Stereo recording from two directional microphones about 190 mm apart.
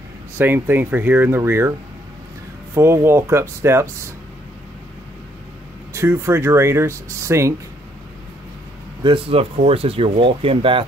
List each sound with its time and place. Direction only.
0.4 s speech: 10° right (ahead or behind)
2.7 s speech: 15° right (ahead or behind)
5.9 s speech: 15° right (ahead or behind)
9.0 s speech: 30° right (ahead or behind)